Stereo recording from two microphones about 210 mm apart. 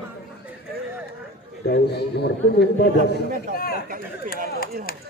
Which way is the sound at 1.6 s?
50° left (ahead or behind).